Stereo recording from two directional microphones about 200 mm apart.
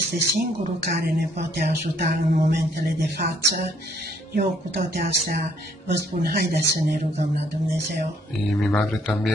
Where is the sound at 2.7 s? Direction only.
50° right (ahead or behind).